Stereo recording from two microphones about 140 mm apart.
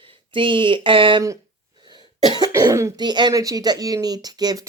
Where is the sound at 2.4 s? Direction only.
20° right (ahead or behind).